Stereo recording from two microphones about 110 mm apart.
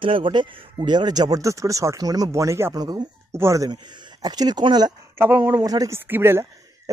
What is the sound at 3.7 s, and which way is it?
Speech, 35° right (ahead or behind).